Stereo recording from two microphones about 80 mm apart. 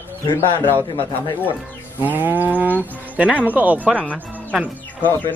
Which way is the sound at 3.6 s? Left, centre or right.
Right.